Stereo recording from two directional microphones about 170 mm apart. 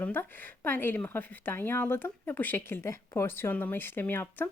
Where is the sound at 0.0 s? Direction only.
10° left (ahead or behind).